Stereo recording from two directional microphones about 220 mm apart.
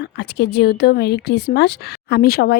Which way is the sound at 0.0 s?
50° left (ahead or behind).